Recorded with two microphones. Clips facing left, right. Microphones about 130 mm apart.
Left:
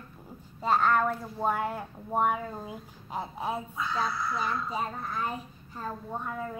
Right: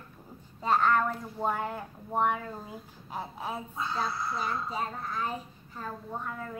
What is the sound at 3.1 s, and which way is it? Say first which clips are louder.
Speech: left 3 dB; 15° left (ahead or behind).